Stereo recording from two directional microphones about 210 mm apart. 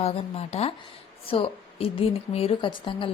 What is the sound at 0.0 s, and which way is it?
A woman's voice, 30° left (ahead or behind).